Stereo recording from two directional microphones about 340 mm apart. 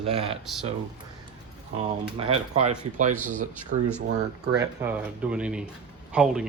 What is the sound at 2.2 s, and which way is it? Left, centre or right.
Speech, centre.